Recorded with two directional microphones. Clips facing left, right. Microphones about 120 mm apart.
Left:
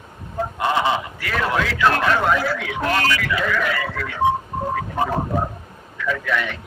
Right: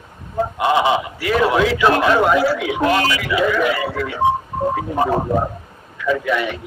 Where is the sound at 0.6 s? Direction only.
15° right (ahead or behind).